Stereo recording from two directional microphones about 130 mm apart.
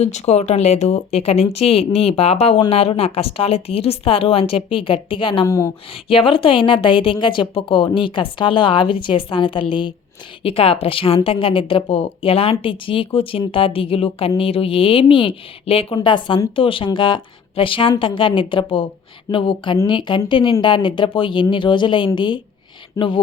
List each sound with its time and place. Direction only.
0.0 s a woman's voice: 55° left (ahead or behind); by 5.5 s 40° left (ahead or behind)
5.5 s speech: 25° left (ahead or behind)
5.9 s a woman's voice: 45° left (ahead or behind)